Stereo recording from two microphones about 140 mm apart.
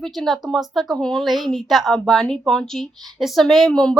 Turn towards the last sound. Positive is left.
turn(degrees=5)  # may be behind; listen again after turning